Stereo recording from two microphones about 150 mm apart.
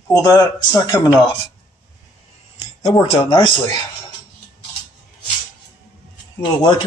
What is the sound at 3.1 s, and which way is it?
Speech, 35° left (ahead or behind).